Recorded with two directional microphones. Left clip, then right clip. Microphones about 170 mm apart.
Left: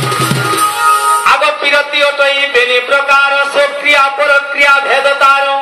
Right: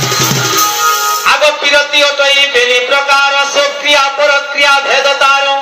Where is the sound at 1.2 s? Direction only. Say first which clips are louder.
Right 1 dB; 30° left (ahead or behind).